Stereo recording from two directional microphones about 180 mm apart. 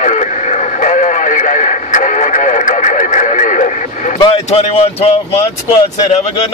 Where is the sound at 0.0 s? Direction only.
40° left (ahead or behind).